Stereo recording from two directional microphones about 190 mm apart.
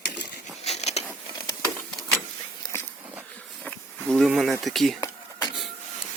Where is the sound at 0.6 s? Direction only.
35° left (ahead or behind).